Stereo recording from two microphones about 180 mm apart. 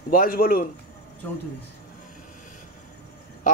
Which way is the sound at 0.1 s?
55° left (ahead or behind).